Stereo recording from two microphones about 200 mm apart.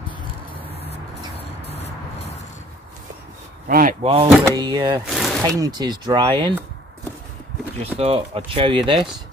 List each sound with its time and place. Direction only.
3.6 s a sound: 45° right (ahead or behind)
4.0 s speech: 30° right (ahead or behind)
5.0 s speech: centre (ahead or behind)
5.6 s speech: 20° right (ahead or behind)
7.8 s speech: 30° right (ahead or behind)